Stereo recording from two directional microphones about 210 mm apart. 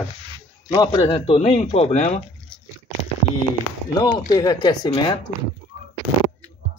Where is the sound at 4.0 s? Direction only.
15° left (ahead or behind).